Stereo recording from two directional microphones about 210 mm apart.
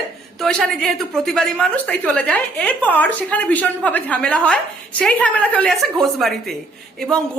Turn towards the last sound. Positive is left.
turn(degrees=0)  # may be behind; listen again after turning